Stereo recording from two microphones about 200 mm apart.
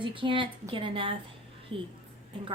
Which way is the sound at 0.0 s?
25° right (ahead or behind).